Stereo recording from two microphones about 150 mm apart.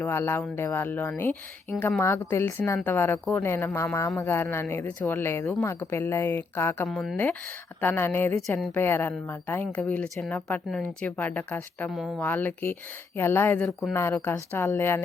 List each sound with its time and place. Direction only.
0.0 s speech: 15° left (ahead or behind)
6.8 s speech: centre (ahead or behind)
7.8 s speech: 15° left (ahead or behind)
8.4 s speech: centre (ahead or behind)
8.7 s speech: 15° left (ahead or behind)
11.9 s speech: centre (ahead or behind)
12.2 s speech: 10° left (ahead or behind)